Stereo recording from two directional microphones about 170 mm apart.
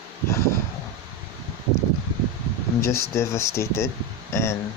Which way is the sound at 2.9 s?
15° left (ahead or behind).